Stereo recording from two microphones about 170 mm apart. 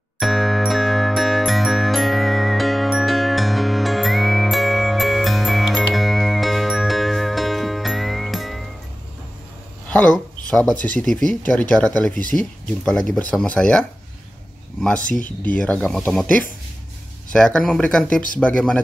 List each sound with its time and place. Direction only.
0.2 s jingle: centre (ahead or behind)
9.8 s a sound: 10° left (ahead or behind)
10.5 s speech: 5° left (ahead or behind)
15.1 s speech: 50° left (ahead or behind)
15.5 s speech: 5° left (ahead or behind)